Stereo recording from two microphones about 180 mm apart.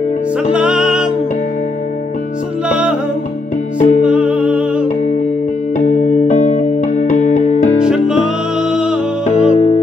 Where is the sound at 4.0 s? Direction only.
5° right (ahead or behind).